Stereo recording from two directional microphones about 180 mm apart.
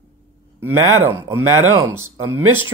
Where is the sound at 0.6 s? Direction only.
15° right (ahead or behind).